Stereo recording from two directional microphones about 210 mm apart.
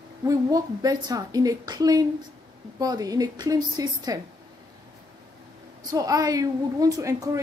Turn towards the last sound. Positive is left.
turn(degrees=-15)  # may be behind; listen again after turning